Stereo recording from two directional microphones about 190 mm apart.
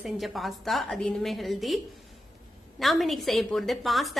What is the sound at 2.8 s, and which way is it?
A woman's voice, centre (ahead or behind).